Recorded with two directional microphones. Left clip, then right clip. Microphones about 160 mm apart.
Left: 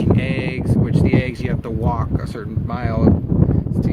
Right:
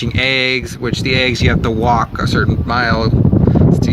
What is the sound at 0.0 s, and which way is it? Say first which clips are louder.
Speech: right 7 dB; 25° right (ahead or behind).